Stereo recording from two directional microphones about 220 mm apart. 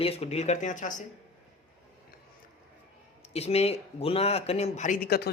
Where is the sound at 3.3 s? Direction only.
30° left (ahead or behind).